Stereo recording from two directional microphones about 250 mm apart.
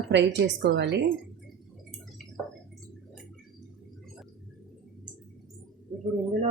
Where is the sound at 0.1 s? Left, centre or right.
Right.